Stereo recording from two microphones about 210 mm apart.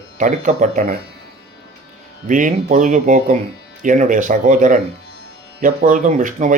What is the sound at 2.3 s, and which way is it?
Speech, 40° right (ahead or behind).